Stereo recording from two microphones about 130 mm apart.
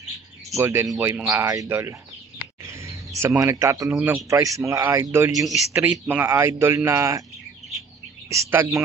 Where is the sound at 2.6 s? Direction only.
20° right (ahead or behind).